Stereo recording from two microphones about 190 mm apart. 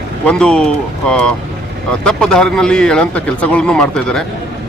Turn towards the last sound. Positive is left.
turn(degrees=5)  # may be behind; listen again after turning